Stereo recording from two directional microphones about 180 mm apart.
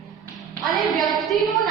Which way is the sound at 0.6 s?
Centre (ahead or behind).